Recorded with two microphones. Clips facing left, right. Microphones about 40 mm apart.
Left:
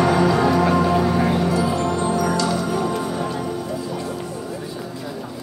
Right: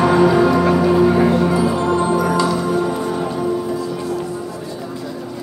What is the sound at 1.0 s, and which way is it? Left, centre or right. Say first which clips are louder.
Music: right 5 dB; centre.